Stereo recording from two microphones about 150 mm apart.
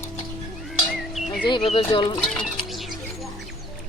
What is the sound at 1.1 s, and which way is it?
Bird, centre (ahead or behind).